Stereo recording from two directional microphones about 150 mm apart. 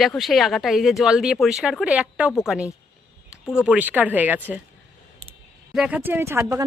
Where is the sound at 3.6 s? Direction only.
10° right (ahead or behind).